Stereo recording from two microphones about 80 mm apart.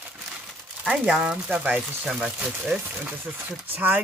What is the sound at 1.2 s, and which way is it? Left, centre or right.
Speech, centre.